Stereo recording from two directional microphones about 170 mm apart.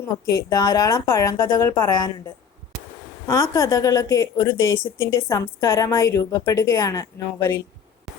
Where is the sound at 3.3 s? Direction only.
15° left (ahead or behind).